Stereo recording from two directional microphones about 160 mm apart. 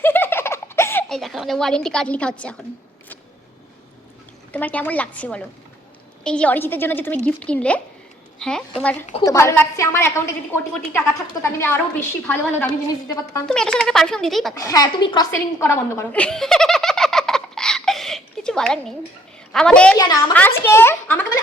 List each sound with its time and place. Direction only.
0.0 s giggle: 15° left (ahead or behind)
1.0 s a woman's voice: centre (ahead or behind)
4.5 s a woman's voice: 10° left (ahead or behind)
14.6 s speech: 25° left (ahead or behind)
15.3 s giggle: 15° left (ahead or behind)
19.5 s a woman's voice: 5° left (ahead or behind)